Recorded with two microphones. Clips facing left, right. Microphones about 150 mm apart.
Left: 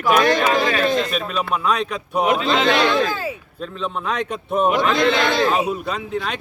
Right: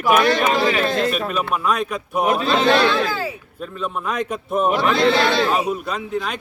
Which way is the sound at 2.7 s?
15° left (ahead or behind).